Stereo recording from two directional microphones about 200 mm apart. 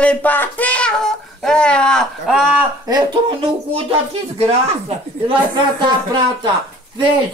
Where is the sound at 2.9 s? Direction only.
25° right (ahead or behind).